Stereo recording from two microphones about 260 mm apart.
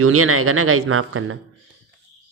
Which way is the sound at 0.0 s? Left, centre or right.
Right.